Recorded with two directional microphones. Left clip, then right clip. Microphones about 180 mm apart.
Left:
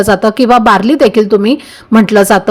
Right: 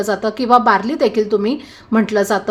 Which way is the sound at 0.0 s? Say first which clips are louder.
Left 10 dB; 35° left (ahead or behind).